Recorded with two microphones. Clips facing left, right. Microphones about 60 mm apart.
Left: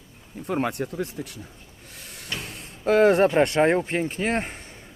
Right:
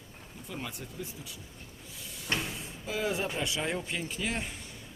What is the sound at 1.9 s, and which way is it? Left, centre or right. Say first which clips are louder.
Cupboard open or close: left 4 dB; left.